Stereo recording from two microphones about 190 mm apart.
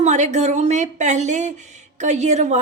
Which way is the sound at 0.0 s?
40° right (ahead or behind).